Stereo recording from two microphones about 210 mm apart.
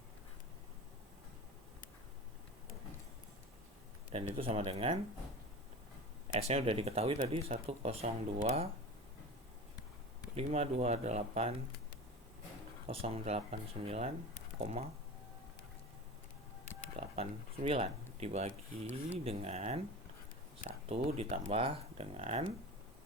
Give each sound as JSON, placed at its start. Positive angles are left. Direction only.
{"t": 4.1, "sound": "speech", "side_deg": -25}
{"t": 6.5, "sound": "speech", "side_deg": -30}
{"t": 10.3, "sound": "speech", "side_deg": -30}
{"t": 12.9, "sound": "speech", "side_deg": -25}
{"t": 17.0, "sound": "speech", "side_deg": -30}